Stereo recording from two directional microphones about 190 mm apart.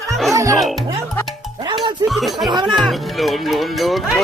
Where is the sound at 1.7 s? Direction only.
25° right (ahead or behind).